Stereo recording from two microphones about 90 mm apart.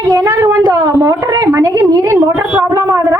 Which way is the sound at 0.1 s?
40° right (ahead or behind).